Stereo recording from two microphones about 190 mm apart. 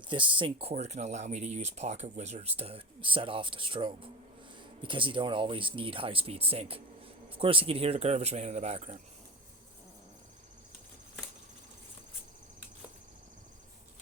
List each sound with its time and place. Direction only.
0.1 s speech: 25° right (ahead or behind)